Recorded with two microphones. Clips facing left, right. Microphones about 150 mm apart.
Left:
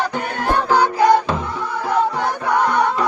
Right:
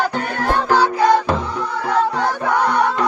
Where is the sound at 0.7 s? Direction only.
15° left (ahead or behind).